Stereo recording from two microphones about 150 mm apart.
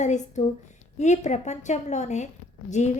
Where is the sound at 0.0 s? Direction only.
50° left (ahead or behind).